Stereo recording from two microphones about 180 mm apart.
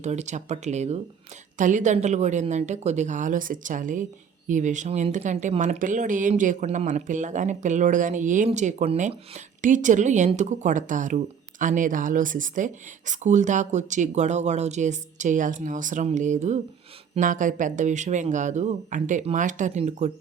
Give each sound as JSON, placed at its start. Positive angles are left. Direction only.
{"t": 0.0, "sound": "speech", "side_deg": -40}